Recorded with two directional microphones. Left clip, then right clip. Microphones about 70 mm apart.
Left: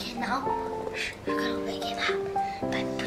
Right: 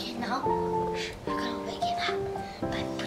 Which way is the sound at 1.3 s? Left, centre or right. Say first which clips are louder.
Left 3 dB; centre.